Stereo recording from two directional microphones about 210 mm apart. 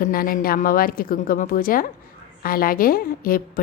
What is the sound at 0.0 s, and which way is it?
A woman's voice, 45° left (ahead or behind).